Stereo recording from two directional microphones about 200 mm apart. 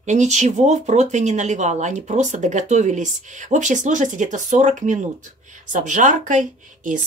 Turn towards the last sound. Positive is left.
turn(degrees=-40)  # may be behind; listen again after turning